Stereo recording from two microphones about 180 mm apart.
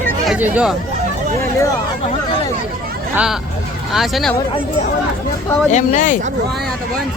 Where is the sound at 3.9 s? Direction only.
Centre (ahead or behind).